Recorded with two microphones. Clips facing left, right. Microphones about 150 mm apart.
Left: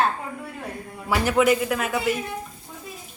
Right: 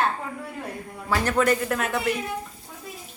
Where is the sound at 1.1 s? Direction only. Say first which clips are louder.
Left 2 dB; 5° left (ahead or behind).